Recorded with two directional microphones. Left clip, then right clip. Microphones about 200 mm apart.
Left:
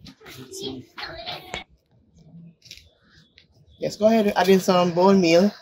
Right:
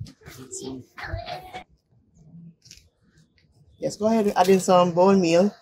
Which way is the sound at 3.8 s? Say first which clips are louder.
Left 3 dB; 25° left (ahead or behind).